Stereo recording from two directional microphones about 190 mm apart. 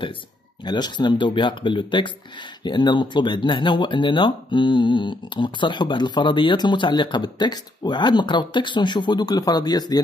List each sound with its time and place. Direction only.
0.7 s speech: 20° left (ahead or behind)